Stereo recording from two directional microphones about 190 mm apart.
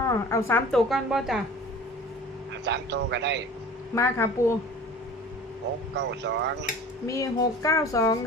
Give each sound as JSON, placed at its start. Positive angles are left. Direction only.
{"t": 0.0, "sound": "a woman's voice", "side_deg": 15}
{"t": 0.9, "sound": "a woman's voice", "side_deg": 0}
{"t": 2.6, "sound": "speech", "side_deg": -65}
{"t": 3.9, "sound": "music", "side_deg": 15}
{"t": 6.0, "sound": "speech", "side_deg": -65}
{"t": 7.1, "sound": "music", "side_deg": 15}